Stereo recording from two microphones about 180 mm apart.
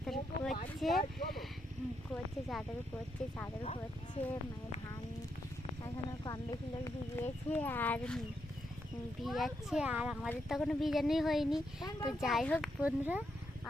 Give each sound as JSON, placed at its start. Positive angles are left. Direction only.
{"t": 0.0, "sound": "a sound", "side_deg": 0}
{"t": 3.6, "sound": "speech", "side_deg": 30}
{"t": 5.8, "sound": "speech", "side_deg": 20}
{"t": 9.2, "sound": "speech", "side_deg": 0}
{"t": 12.8, "sound": "speech", "side_deg": -10}